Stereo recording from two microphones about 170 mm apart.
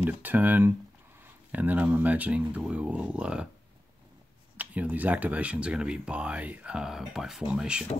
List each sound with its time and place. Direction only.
0.0 s speech: 10° right (ahead or behind)
4.6 s speech: 10° right (ahead or behind)